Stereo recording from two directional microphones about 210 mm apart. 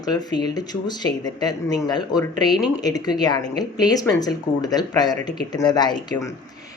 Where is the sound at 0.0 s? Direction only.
20° left (ahead or behind).